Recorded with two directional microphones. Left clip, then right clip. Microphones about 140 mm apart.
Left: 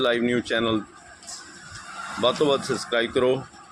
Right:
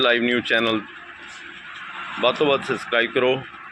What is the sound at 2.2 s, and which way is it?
Speech, 20° left (ahead or behind).